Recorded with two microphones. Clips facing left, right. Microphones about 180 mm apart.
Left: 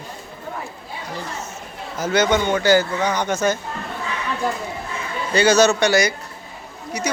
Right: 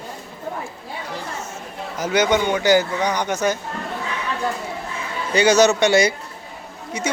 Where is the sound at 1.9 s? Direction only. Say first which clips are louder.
Even; 15° right (ahead or behind).